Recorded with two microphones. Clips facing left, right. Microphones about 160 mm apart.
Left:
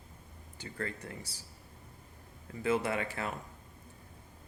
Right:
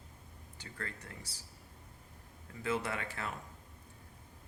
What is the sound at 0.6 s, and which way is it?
Speech, 15° left (ahead or behind).